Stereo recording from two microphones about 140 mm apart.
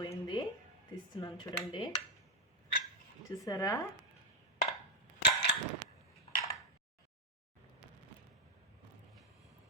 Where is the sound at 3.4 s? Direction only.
25° left (ahead or behind).